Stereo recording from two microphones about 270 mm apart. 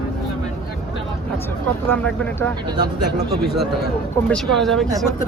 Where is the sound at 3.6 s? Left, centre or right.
Centre.